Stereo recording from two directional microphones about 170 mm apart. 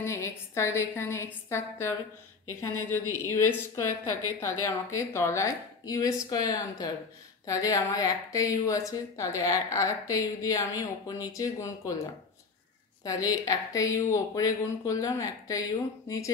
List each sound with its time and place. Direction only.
0.0 s a woman's voice: 15° left (ahead or behind)
13.0 s a woman's voice: 20° left (ahead or behind)